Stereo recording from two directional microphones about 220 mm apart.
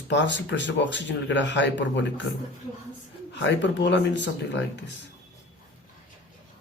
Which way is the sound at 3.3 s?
55° left (ahead or behind).